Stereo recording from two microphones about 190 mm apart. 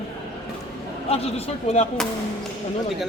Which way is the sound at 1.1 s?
30° left (ahead or behind).